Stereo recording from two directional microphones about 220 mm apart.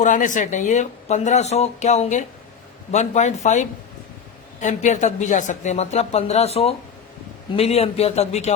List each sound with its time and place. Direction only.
0.0 s a man's voice: 35° left (ahead or behind)